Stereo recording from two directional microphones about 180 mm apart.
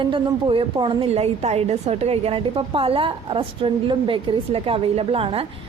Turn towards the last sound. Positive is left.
turn(degrees=-30)  # may be behind; listen again after turning